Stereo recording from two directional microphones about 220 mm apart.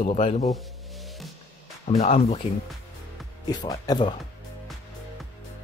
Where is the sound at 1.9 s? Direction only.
30° left (ahead or behind).